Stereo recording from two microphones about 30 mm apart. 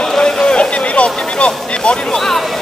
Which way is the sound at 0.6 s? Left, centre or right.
Left.